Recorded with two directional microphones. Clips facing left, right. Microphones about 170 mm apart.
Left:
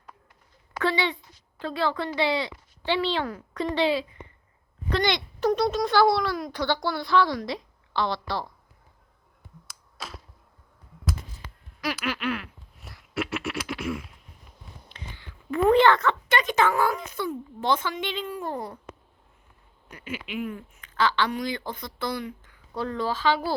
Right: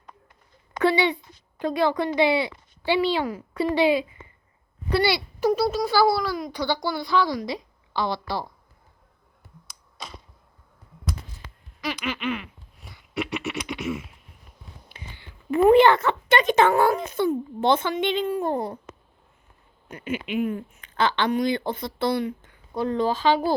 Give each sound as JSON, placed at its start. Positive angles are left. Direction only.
{"t": 0.8, "sound": "a woman's voice", "side_deg": -15}
{"t": 9.6, "sound": "a sound", "side_deg": 5}
{"t": 14.8, "sound": "a woman's voice", "side_deg": -15}
{"t": 19.9, "sound": "speech", "side_deg": -25}